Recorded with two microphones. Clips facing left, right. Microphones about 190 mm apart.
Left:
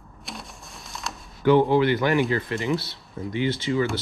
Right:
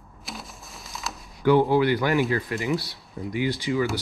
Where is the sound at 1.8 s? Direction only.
20° left (ahead or behind).